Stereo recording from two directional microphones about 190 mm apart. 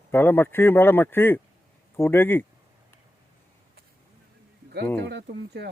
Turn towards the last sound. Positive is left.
turn(degrees=-65)  # may be behind; listen again after turning